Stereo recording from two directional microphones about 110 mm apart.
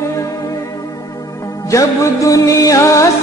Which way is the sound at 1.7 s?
30° left (ahead or behind).